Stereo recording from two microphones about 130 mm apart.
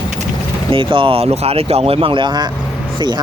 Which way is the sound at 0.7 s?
40° right (ahead or behind).